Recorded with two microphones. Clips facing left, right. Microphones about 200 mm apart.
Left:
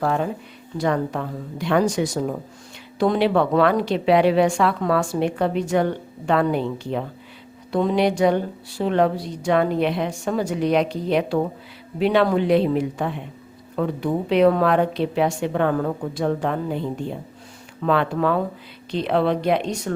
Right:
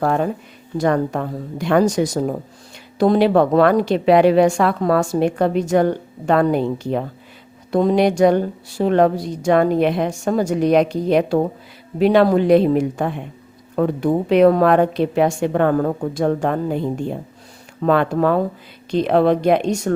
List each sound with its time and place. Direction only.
0.0 s a woman's voice: 45° right (ahead or behind)
17.7 s a woman's voice: 45° right (ahead or behind)